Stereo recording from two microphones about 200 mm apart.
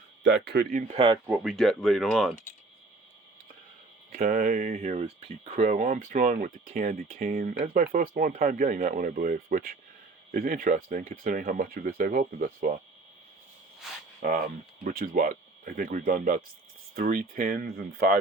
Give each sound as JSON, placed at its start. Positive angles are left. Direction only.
{"t": 0.2, "sound": "speech", "side_deg": -60}
{"t": 1.3, "sound": "speech", "side_deg": 0}
{"t": 4.1, "sound": "speech", "side_deg": -45}
{"t": 14.2, "sound": "speech", "side_deg": -45}